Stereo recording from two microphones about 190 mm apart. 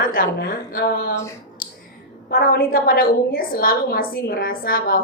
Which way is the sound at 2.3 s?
50° left (ahead or behind).